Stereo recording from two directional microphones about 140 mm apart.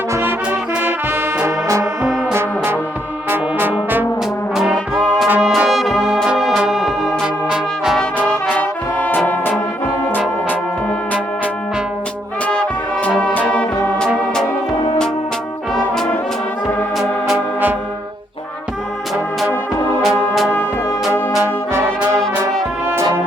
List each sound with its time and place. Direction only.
0.1 s music: 15° right (ahead or behind)
0.8 s brass instrument: 15° right (ahead or behind)
2.3 s music: 15° right (ahead or behind)
4.5 s brass instrument: 5° right (ahead or behind)
8.4 s brass instrument: 10° left (ahead or behind)
13.1 s music: 10° left (ahead or behind)
17.0 s music: centre (ahead or behind)
20.0 s music: centre (ahead or behind)
21.4 s brass instrument: 20° right (ahead or behind)